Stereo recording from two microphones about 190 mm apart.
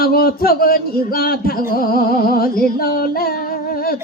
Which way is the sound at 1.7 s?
50° left (ahead or behind).